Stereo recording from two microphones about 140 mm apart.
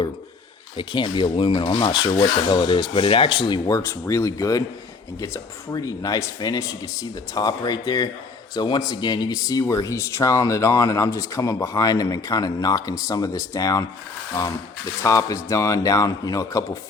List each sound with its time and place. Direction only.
0.8 s speech: 35° left (ahead or behind)